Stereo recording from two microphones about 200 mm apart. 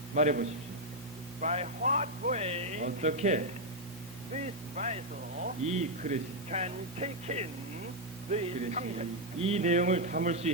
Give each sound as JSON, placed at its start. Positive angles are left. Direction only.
{"t": 0.1, "sound": "a man's voice", "side_deg": -40}